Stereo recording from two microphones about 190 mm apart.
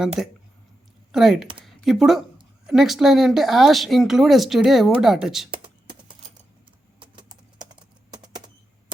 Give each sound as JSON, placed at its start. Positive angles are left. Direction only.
{"t": 0.2, "sound": "speech", "side_deg": 0}
{"t": 1.6, "sound": "a sound", "side_deg": 0}
{"t": 2.6, "sound": "speech", "side_deg": 0}
{"t": 5.5, "sound": "computer keyboard", "side_deg": -25}
{"t": 7.0, "sound": "typing", "side_deg": -25}